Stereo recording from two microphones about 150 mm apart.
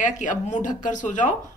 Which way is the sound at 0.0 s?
55° left (ahead or behind).